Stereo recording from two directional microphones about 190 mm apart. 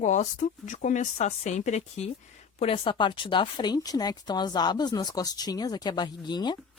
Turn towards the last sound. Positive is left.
turn(degrees=20)  # may be behind; listen again after turning